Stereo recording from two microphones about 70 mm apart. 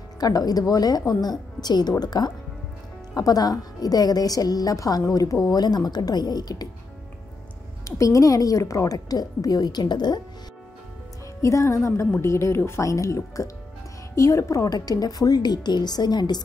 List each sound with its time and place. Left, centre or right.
0.2 s a woman's voice: left
3.2 s a woman's voice: left
7.8 s speech: left
8.9 s a woman's voice: left
11.4 s a woman's voice: left